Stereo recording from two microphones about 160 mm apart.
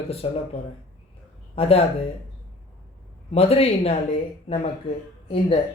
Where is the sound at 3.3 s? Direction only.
40° left (ahead or behind).